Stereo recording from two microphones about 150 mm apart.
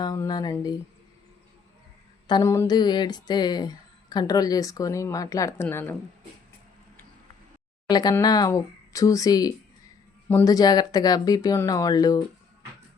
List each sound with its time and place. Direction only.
0.0 s speech: 25° left (ahead or behind)
2.2 s speech: 25° left (ahead or behind)
7.9 s speech: 25° left (ahead or behind)